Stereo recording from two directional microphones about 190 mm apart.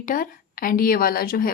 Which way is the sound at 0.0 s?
45° left (ahead or behind).